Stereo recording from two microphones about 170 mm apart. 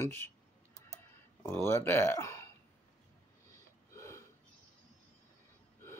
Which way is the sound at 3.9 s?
15° left (ahead or behind).